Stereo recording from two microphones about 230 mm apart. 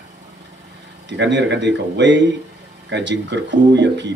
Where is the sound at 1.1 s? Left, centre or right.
Right.